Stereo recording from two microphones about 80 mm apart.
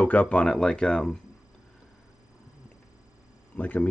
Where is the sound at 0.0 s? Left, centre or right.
Centre.